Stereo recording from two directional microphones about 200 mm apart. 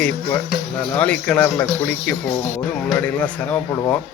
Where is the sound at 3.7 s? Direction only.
20° left (ahead or behind).